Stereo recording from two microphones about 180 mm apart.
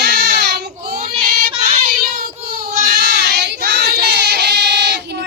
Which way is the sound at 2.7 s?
55° right (ahead or behind).